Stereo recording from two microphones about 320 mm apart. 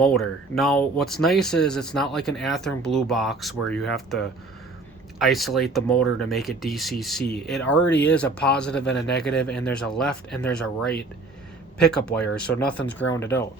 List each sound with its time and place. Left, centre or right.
0.0 s speech: centre
5.2 s speech: centre
8.8 s a man's voice: left
9.2 s speech: centre